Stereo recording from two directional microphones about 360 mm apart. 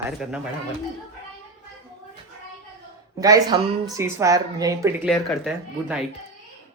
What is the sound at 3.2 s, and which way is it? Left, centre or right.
A woman's voice, centre.